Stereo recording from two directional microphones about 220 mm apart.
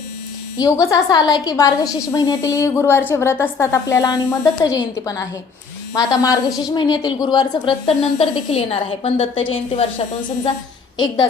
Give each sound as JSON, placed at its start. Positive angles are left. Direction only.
{"t": 0.6, "sound": "a woman's voice", "side_deg": 15}
{"t": 10.9, "sound": "a woman's voice", "side_deg": 20}